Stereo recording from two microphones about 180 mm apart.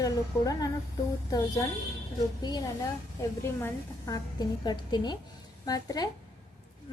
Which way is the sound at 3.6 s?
20° left (ahead or behind).